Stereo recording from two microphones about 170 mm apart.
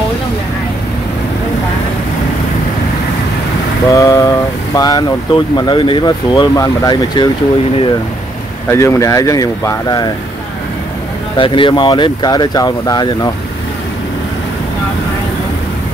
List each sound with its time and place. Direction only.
3.9 s speech: 20° left (ahead or behind)
8.6 s speech: 15° left (ahead or behind)
11.3 s speech: 30° left (ahead or behind)